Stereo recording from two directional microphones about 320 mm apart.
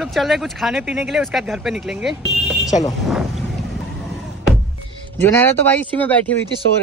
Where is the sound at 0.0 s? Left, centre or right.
Centre.